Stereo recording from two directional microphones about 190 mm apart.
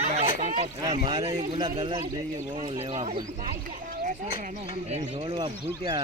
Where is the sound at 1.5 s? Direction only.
20° right (ahead or behind).